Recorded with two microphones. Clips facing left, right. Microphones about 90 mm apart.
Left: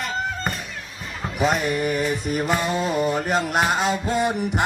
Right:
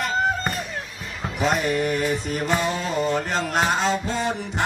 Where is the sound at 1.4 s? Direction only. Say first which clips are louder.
Even; centre (ahead or behind).